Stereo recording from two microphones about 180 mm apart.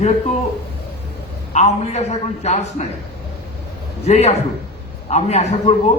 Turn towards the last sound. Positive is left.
turn(degrees=35)  # may be behind; listen again after turning